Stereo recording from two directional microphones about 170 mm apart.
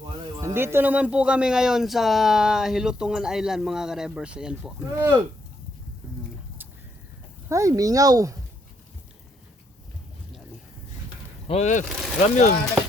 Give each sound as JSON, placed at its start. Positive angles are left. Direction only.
{"t": 0.4, "sound": "speech", "side_deg": -15}
{"t": 4.9, "sound": "speech", "side_deg": -20}
{"t": 7.5, "sound": "speech", "side_deg": -20}
{"t": 11.4, "sound": "speech", "side_deg": 40}